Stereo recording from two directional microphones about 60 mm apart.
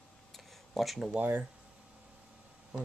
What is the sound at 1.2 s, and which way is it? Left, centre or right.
Speech, right.